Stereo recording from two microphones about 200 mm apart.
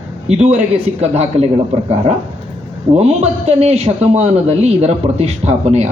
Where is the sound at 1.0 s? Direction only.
30° right (ahead or behind).